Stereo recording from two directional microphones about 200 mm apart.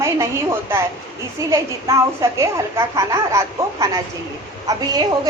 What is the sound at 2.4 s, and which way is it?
A woman's voice, 15° right (ahead or behind).